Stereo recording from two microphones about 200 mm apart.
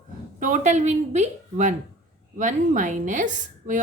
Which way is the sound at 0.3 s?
40° right (ahead or behind).